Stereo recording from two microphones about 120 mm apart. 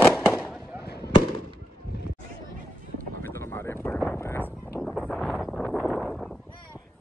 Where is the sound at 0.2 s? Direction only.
20° left (ahead or behind).